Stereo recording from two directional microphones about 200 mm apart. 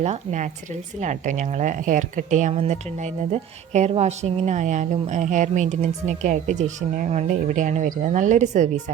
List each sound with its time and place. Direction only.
0.0 s a woman's voice: 35° right (ahead or behind)